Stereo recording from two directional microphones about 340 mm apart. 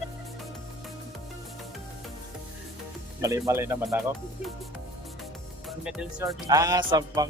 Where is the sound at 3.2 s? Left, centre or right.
Centre.